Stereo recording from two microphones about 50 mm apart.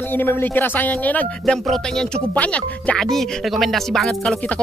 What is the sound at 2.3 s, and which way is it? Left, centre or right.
Speech, left.